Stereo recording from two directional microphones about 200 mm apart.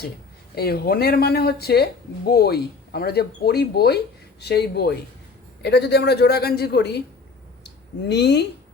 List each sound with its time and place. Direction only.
0.5 s speech: 50° left (ahead or behind)